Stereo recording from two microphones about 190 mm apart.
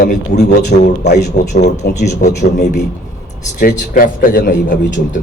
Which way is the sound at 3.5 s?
50° left (ahead or behind).